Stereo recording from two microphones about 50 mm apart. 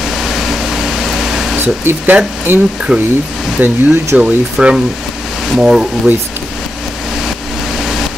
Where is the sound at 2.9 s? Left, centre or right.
Right.